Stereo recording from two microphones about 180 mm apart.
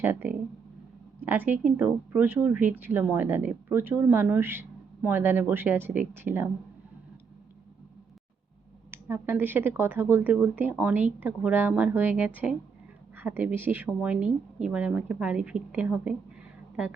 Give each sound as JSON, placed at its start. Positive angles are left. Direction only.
{"t": 0.0, "sound": "a woman's voice", "side_deg": -10}
{"t": 8.9, "sound": "a woman's voice", "side_deg": -10}